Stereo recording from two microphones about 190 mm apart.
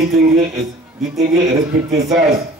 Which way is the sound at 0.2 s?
35° right (ahead or behind).